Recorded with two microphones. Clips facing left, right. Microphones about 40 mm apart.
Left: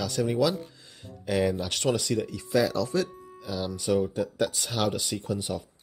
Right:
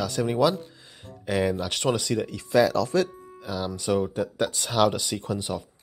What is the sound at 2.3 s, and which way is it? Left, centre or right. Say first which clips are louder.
Speech: right 6 dB; right.